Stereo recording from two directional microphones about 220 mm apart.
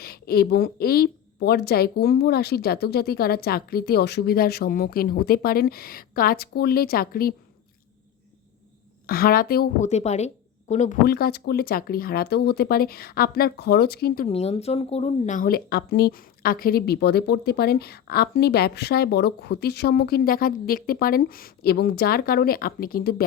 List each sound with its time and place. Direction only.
0.0 s speech: 45° left (ahead or behind)
9.0 s a woman's voice: 45° left (ahead or behind)
11.0 s speech: 45° left (ahead or behind)
14.3 s speech: 30° left (ahead or behind)